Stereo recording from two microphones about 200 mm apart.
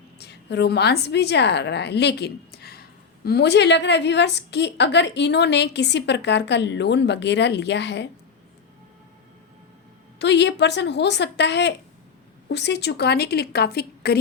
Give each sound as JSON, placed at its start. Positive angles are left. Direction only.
{"t": 0.2, "sound": "a woman's voice", "side_deg": 55}
{"t": 10.2, "sound": "a woman's voice", "side_deg": 60}